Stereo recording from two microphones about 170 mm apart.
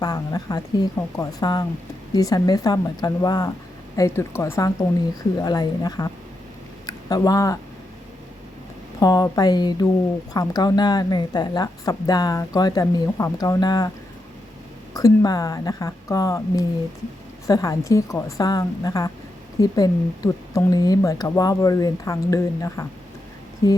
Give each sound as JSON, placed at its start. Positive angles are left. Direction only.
{"t": 0.0, "sound": "a woman's voice", "side_deg": 20}
{"t": 9.0, "sound": "a woman's voice", "side_deg": 20}
{"t": 14.9, "sound": "a woman's voice", "side_deg": 20}